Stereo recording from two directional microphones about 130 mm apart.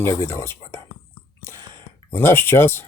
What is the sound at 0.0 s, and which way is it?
Speech, 20° left (ahead or behind).